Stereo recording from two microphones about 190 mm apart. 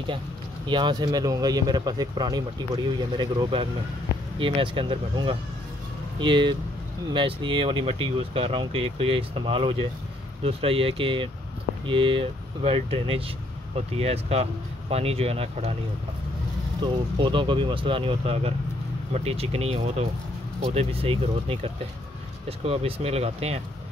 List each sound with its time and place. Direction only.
0.7 s speech: 25° right (ahead or behind)
16.8 s speech: 25° right (ahead or behind)